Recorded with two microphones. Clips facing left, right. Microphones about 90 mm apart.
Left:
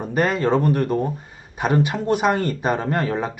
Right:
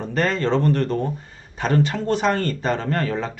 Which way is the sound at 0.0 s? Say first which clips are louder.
Left 2 dB; 15° left (ahead or behind).